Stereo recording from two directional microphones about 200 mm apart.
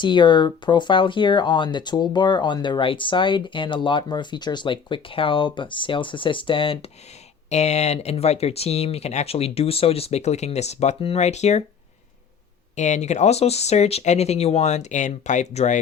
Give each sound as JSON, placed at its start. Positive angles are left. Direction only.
{"t": 0.0, "sound": "speech", "side_deg": 25}
{"t": 12.7, "sound": "speech", "side_deg": 35}